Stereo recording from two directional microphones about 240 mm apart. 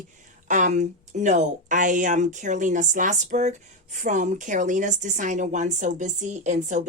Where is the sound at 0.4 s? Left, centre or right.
Right.